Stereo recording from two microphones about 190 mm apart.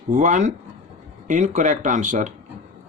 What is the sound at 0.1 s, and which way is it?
Speech, 40° right (ahead or behind).